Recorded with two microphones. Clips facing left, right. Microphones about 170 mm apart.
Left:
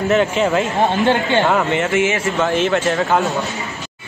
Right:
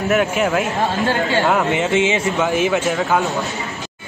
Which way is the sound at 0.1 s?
5° right (ahead or behind).